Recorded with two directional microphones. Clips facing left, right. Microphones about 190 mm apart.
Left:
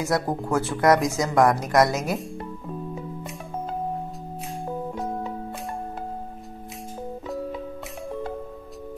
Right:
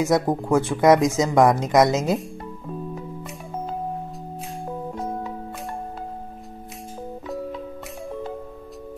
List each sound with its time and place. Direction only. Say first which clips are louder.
0.0 s speech: right 4 dB; 20° right (ahead or behind)